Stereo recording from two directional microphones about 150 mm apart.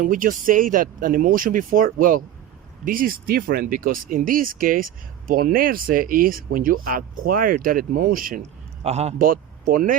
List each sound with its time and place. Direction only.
0.0 s speech: 65° right (ahead or behind)
8.8 s a man's voice: 45° right (ahead or behind)
9.1 s speech: 70° right (ahead or behind)